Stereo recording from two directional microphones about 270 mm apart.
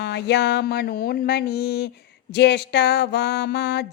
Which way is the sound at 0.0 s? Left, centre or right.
Left.